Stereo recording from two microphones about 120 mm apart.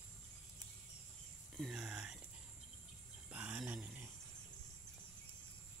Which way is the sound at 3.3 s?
15° right (ahead or behind).